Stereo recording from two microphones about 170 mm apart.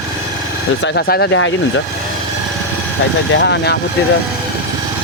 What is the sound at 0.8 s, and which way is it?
Speech, 80° left.